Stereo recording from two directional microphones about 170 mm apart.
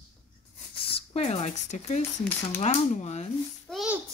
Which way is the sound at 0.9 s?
35° left (ahead or behind).